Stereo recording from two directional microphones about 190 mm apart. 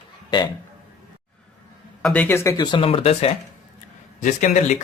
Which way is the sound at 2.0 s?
5° left (ahead or behind).